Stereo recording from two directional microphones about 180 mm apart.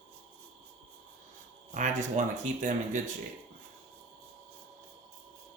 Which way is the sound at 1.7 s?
45° right (ahead or behind).